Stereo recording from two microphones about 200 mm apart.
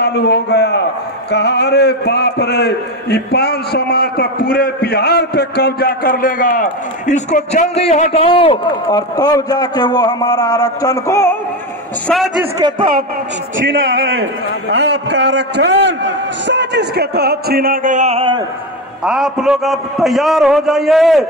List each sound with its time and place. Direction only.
0.0 s a sound: 55° left (ahead or behind)
1.3 s a man's voice: 55° left (ahead or behind); by 11.3 s 15° left (ahead or behind)
12.1 s a man's voice: centre (ahead or behind)
12.5 s speech: 25° right (ahead or behind)
13.6 s a man's voice: 75° right (ahead or behind); by 18.4 s 30° right (ahead or behind)
19.0 s a man's voice: centre (ahead or behind)